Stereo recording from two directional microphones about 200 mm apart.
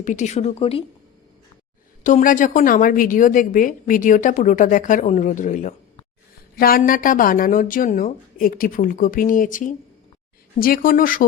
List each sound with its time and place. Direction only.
0.0 s a woman's voice: 40° left (ahead or behind)
2.0 s a woman's voice: 40° left (ahead or behind)